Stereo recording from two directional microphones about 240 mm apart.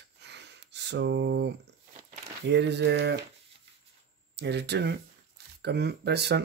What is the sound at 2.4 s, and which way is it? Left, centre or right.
Speech, right.